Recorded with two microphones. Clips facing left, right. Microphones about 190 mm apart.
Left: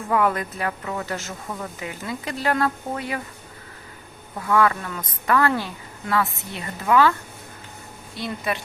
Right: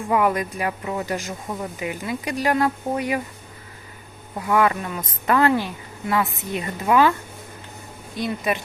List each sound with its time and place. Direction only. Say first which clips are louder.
0.1 s a woman's voice: right 1 dB; 10° right (ahead or behind)
4.4 s a woman's voice: right 1 dB; 15° right (ahead or behind)
8.2 s a woman's voice: right 3 dB; 20° right (ahead or behind)